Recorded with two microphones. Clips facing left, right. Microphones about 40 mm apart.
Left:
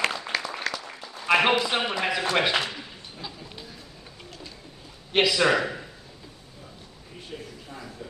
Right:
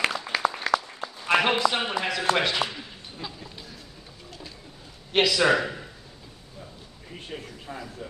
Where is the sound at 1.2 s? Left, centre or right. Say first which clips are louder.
Left 1 dB; centre.